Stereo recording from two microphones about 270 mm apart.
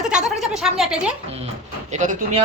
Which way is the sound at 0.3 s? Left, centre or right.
Centre.